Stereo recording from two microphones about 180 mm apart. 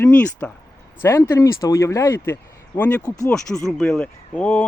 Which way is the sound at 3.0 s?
20° left (ahead or behind).